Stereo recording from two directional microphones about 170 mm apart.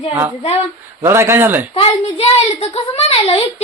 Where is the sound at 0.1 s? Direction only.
15° right (ahead or behind).